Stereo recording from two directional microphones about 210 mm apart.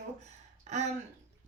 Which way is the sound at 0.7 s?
35° right (ahead or behind).